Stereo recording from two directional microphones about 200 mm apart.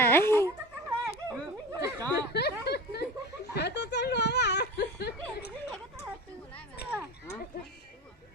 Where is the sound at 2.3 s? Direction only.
55° left (ahead or behind).